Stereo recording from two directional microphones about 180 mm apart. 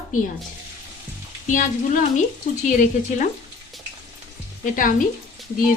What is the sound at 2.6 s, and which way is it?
Speech, 40° left (ahead or behind).